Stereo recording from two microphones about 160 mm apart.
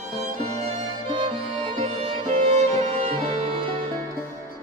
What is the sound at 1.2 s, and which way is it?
Music, 45° right (ahead or behind).